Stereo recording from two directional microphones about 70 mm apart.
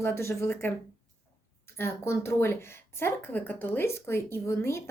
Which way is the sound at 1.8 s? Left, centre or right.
Left.